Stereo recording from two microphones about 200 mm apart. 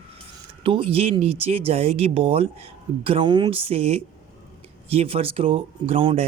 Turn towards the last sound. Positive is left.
turn(degrees=-25)  # may be behind; listen again after turning